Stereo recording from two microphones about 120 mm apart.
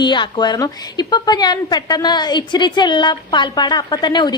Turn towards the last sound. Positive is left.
turn(degrees=40)  # may be behind; listen again after turning